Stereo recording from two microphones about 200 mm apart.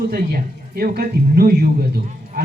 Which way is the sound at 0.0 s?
50° right (ahead or behind).